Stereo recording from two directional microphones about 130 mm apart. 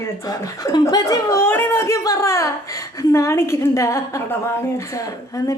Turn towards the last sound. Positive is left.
turn(degrees=25)  # may be behind; listen again after turning